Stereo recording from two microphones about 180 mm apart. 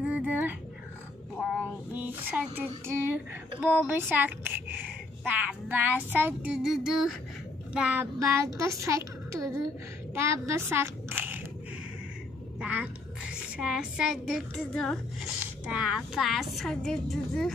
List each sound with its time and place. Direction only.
0.0 s dog: 10° right (ahead or behind)
1.9 s speech: 10° right (ahead or behind)
3.6 s a child's voice: 10° right (ahead or behind)
12.5 s a woman's voice: 5° right (ahead or behind)